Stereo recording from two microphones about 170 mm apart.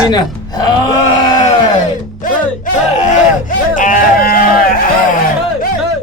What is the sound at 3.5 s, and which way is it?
Music, 50° left (ahead or behind).